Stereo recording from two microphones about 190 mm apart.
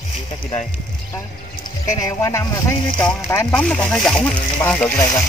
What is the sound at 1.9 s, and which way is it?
Speech, 15° left (ahead or behind).